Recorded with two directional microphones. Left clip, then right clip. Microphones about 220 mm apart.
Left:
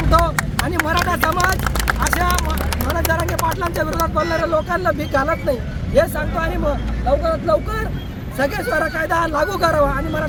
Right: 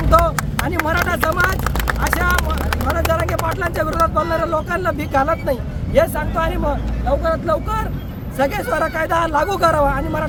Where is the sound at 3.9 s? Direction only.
10° right (ahead or behind).